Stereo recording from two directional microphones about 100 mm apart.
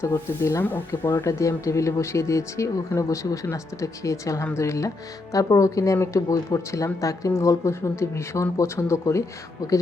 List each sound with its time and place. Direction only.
0.0 s speech: 30° left (ahead or behind)